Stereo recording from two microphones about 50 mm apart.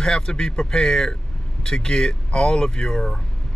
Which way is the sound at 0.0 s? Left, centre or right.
Centre.